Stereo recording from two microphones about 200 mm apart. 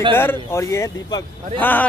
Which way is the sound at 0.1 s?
10° left (ahead or behind).